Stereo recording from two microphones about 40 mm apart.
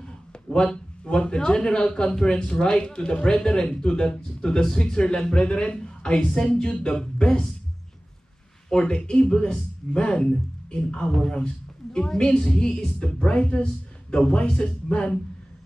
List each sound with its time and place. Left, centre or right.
0.0 s speech: left
7.0 s speech: centre
8.6 s speech: left
11.4 s a sound: left
12.2 s speech: left